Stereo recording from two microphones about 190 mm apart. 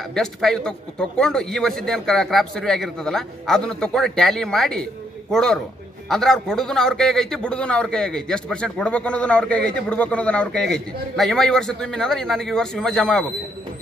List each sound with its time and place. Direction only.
0.1 s a man's voice: 5° left (ahead or behind)